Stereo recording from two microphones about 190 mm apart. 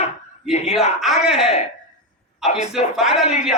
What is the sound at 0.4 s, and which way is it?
A man's voice, 5° right (ahead or behind).